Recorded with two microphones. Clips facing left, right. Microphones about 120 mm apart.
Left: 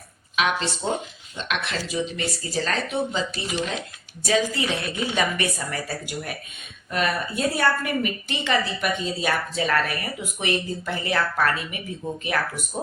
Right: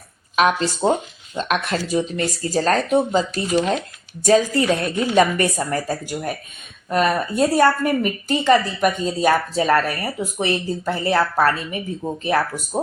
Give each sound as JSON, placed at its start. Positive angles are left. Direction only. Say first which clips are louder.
{"t": 0.3, "sound": "a woman's voice", "louder": "right 6 dB", "side_deg": -40}